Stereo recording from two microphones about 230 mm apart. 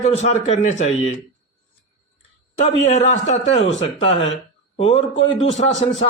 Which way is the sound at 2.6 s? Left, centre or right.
Left.